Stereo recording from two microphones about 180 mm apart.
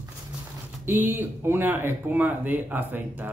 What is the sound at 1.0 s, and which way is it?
A man's voice, 10° right (ahead or behind).